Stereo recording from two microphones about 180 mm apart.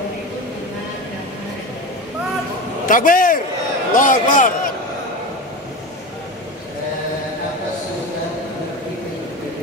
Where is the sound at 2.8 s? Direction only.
50° left (ahead or behind).